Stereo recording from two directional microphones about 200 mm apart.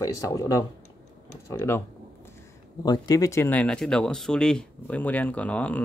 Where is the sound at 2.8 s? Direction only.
20° left (ahead or behind).